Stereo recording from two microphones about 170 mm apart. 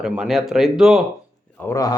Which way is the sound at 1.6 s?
20° left (ahead or behind).